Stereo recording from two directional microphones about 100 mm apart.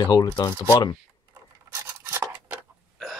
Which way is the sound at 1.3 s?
25° right (ahead or behind).